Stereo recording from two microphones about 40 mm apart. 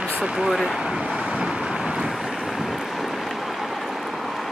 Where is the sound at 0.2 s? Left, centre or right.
Centre.